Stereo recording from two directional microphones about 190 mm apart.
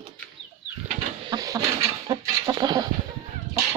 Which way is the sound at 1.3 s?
20° right (ahead or behind).